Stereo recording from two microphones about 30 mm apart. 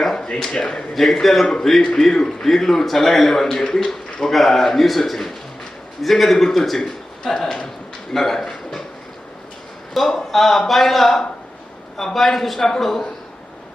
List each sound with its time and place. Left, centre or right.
0.0 s a sound: centre
0.5 s speech: left
0.9 s speech: centre
2.0 s a man's voice: left
8.1 s speech: centre
9.9 s speech: centre